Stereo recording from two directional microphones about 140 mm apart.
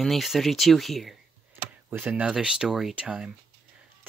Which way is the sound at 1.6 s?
15° right (ahead or behind).